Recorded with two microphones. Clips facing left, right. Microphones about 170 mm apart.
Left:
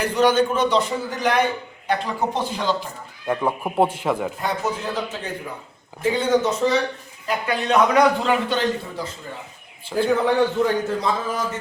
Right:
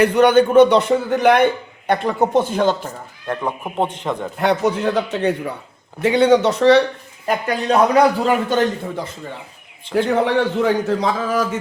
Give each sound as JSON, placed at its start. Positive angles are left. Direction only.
{"t": 0.0, "sound": "a man's voice", "side_deg": -60}
{"t": 3.2, "sound": "speech", "side_deg": 5}
{"t": 4.4, "sound": "a man's voice", "side_deg": -70}
{"t": 7.7, "sound": "a man's voice", "side_deg": -35}
{"t": 9.9, "sound": "a man's voice", "side_deg": -75}